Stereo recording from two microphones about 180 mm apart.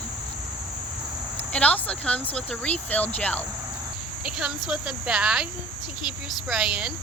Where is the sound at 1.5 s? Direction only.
10° left (ahead or behind).